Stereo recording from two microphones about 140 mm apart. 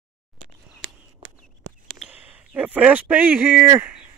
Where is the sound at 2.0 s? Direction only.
10° right (ahead or behind).